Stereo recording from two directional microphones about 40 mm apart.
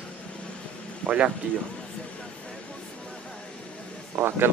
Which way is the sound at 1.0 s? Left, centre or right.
Centre.